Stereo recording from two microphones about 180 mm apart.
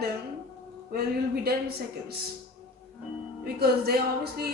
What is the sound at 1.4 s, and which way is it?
Speech, 60° right (ahead or behind).